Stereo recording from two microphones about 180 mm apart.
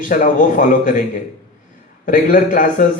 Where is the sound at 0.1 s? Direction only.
45° left (ahead or behind).